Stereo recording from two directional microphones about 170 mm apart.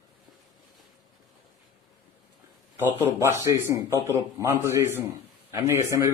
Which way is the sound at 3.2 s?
15° right (ahead or behind).